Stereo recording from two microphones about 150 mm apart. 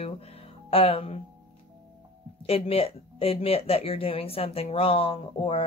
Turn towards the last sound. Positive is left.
turn(degrees=35)  # may be behind; listen again after turning